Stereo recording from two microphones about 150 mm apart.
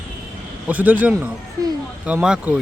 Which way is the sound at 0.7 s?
10° right (ahead or behind).